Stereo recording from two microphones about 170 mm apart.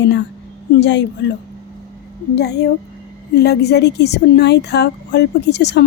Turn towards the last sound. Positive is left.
turn(degrees=90)